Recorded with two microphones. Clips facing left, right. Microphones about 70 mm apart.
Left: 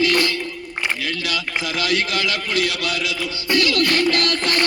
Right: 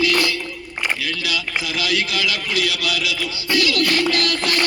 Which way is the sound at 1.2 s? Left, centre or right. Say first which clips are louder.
Even; left.